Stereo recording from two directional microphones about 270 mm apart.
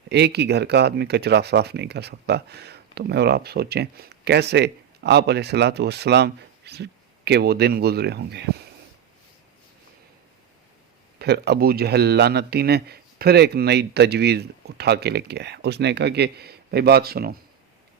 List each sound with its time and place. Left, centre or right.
0.1 s speech: right
11.2 s speech: right